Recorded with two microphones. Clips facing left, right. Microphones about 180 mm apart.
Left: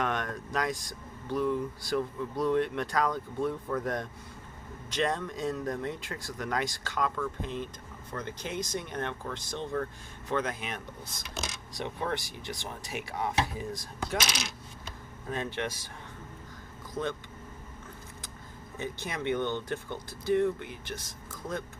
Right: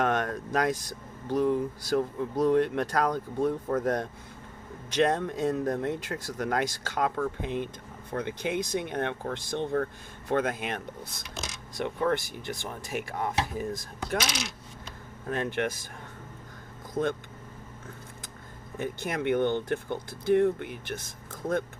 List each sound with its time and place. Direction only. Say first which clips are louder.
0.0 s speech: right 5 dB; 50° right (ahead or behind)
15.3 s speech: right 4 dB; 55° right (ahead or behind)
17.0 s speech: right 5 dB; 45° right (ahead or behind)
18.8 s speech: right 4 dB; 55° right (ahead or behind)